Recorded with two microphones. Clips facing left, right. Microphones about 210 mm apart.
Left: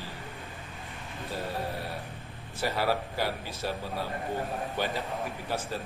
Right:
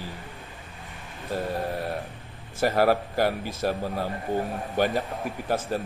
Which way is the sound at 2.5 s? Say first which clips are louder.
Right 7 dB; 50° right (ahead or behind).